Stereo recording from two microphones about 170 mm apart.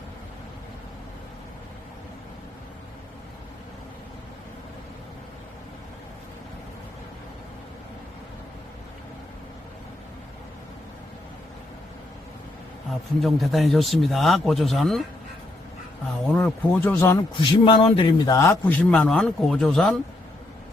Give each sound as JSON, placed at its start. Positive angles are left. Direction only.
{"t": 12.9, "sound": "speech", "side_deg": 0}
{"t": 16.3, "sound": "speech", "side_deg": 5}
{"t": 17.7, "sound": "a man's voice", "side_deg": 30}
{"t": 18.3, "sound": "speech", "side_deg": 15}